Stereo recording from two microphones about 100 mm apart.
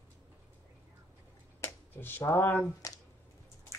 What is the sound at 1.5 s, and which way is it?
Finger snapping, 25° left (ahead or behind).